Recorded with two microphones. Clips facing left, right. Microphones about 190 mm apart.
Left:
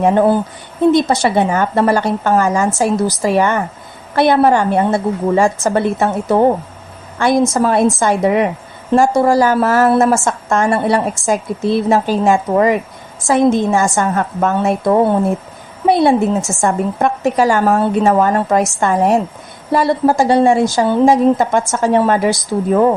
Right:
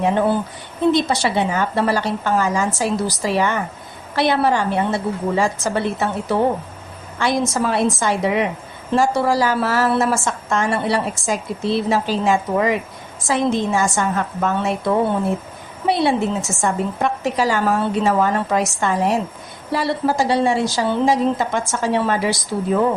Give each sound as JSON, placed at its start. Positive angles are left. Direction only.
{"t": 0.0, "sound": "a woman's voice", "side_deg": 50}